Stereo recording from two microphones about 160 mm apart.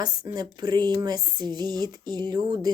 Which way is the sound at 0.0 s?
25° right (ahead or behind).